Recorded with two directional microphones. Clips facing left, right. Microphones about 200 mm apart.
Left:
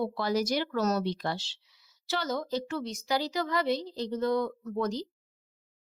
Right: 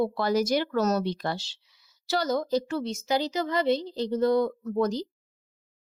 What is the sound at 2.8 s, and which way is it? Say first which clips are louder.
A woman's voice: right 4 dB; 25° right (ahead or behind).